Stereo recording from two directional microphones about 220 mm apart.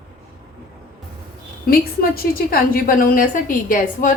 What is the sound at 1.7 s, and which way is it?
A woman's voice, 40° left (ahead or behind).